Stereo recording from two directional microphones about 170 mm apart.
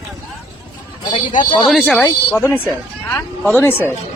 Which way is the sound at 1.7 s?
Centre (ahead or behind).